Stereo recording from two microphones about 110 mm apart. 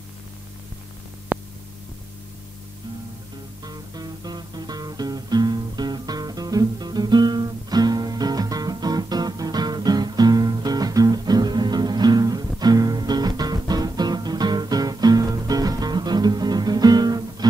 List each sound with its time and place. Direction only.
1.3 s hum: 15° right (ahead or behind)
3.6 s music: 35° right (ahead or behind)